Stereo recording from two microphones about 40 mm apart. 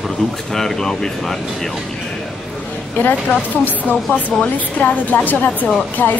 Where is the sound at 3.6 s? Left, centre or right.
Left.